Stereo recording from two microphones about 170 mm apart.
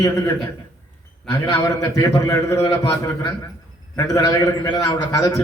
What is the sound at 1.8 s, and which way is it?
A man's voice, 20° left (ahead or behind).